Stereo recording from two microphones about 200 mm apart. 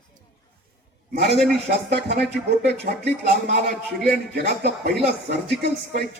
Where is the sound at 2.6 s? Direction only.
55° right (ahead or behind).